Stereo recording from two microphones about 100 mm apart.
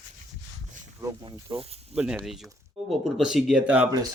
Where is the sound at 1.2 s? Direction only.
70° right (ahead or behind).